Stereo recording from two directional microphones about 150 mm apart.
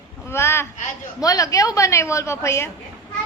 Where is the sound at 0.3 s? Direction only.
15° left (ahead or behind).